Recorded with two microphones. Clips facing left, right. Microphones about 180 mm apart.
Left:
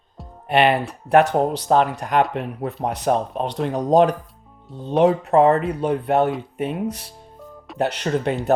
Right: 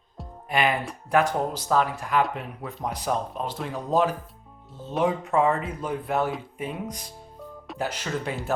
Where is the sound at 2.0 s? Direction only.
70° left (ahead or behind).